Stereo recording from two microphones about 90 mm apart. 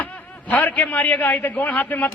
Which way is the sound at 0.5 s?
15° left (ahead or behind).